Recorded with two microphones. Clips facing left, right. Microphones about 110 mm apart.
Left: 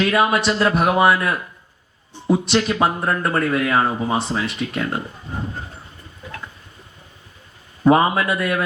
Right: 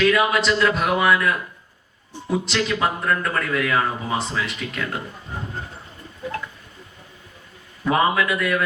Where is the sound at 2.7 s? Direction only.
30° left (ahead or behind).